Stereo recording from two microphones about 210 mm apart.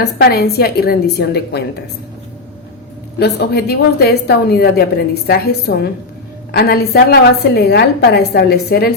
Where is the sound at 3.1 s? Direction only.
50° left (ahead or behind).